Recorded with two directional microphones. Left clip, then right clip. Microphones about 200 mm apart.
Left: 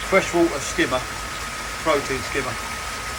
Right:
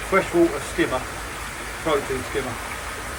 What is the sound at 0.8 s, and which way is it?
Speech, centre (ahead or behind).